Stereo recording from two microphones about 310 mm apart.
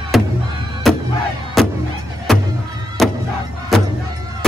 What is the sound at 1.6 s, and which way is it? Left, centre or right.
Vehicle, centre.